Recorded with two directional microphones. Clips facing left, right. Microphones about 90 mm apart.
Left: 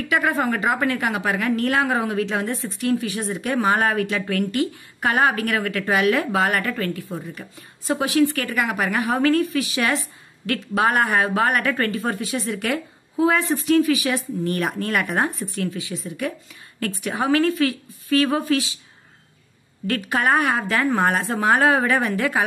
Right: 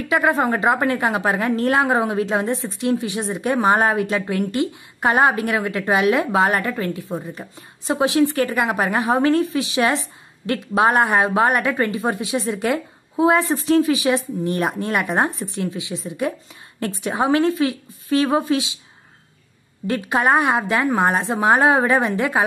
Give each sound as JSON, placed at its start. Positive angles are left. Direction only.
{"t": 0.1, "sound": "a woman's voice", "side_deg": -25}
{"t": 19.9, "sound": "a woman's voice", "side_deg": -20}